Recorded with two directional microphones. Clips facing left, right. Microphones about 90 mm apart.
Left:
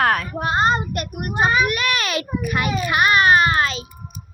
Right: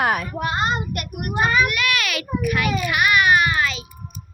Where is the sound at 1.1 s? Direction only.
30° left (ahead or behind).